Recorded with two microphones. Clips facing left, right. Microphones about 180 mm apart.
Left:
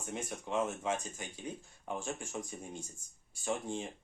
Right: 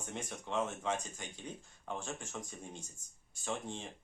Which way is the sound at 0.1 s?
5° left (ahead or behind).